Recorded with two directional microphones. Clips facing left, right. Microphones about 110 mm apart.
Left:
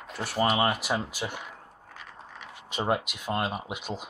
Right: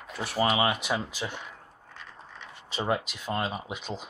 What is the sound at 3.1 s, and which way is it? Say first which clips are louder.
Speech: left 1 dB; 5° left (ahead or behind).